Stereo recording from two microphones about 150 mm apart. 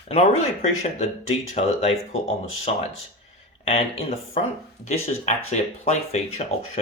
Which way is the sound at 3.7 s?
40° left (ahead or behind).